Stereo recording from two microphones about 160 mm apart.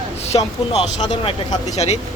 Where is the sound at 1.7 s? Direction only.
40° left (ahead or behind).